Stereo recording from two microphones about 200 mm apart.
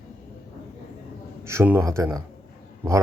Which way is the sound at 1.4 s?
15° right (ahead or behind).